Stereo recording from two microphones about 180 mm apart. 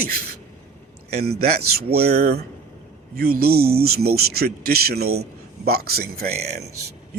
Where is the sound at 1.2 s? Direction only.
60° right (ahead or behind).